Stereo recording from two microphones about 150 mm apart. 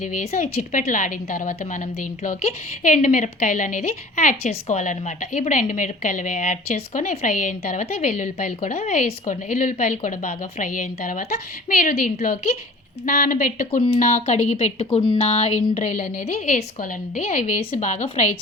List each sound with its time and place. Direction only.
0.0 s a woman's voice: 50° left (ahead or behind)
7.9 s a woman's voice: 50° left (ahead or behind)
15.2 s a woman's voice: 45° left (ahead or behind)